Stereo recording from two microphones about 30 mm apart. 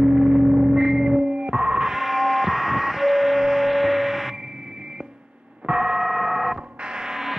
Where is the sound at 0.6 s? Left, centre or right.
Centre.